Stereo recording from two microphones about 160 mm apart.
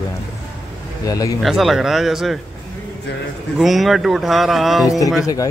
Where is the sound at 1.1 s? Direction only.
25° left (ahead or behind).